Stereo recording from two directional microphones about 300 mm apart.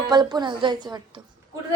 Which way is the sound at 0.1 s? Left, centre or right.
Centre.